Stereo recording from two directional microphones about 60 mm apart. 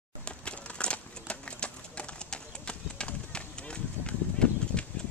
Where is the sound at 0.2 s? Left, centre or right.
Centre.